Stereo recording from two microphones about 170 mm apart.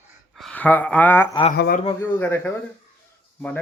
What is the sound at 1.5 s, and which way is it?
Speech, 75° left (ahead or behind).